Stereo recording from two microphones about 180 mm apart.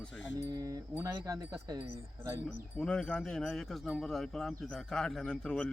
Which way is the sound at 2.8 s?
5° left (ahead or behind).